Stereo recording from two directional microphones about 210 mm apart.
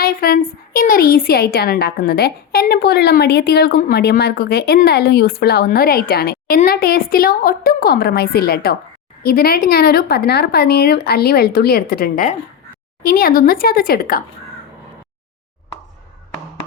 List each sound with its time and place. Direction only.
0.0 s a woman's voice: 45° left (ahead or behind)